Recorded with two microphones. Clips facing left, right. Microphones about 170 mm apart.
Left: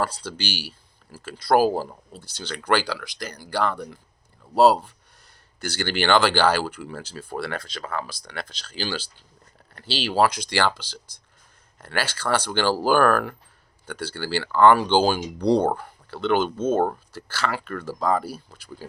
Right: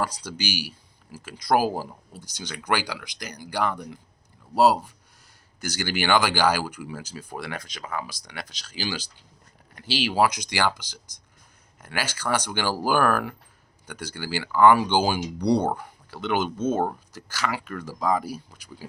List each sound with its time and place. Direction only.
0.0 s speech: 15° right (ahead or behind)